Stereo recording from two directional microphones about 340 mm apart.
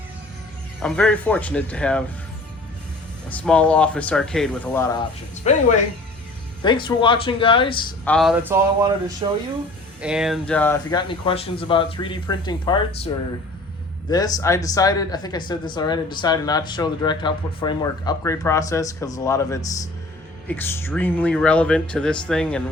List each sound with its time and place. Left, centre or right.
0.8 s speech: centre
3.2 s speech: centre
5.4 s speech: left
8.1 s speech: centre
14.1 s speech: centre